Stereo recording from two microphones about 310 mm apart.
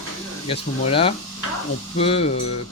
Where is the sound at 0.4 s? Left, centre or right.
Centre.